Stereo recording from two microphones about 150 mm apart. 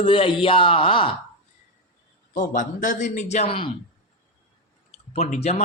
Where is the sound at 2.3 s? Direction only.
60° left (ahead or behind).